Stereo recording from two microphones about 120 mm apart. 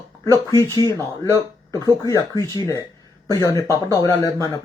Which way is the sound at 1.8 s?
30° left (ahead or behind).